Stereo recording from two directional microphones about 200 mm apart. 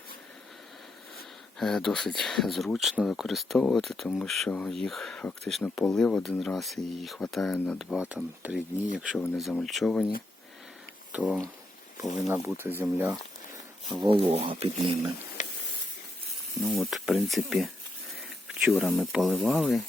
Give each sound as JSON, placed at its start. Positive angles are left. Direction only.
{"t": 1.5, "sound": "speech", "side_deg": 0}
{"t": 11.2, "sound": "speech", "side_deg": 5}
{"t": 12.8, "sound": "speech", "side_deg": -10}
{"t": 13.9, "sound": "speech", "side_deg": -25}
{"t": 16.6, "sound": "speech", "side_deg": 0}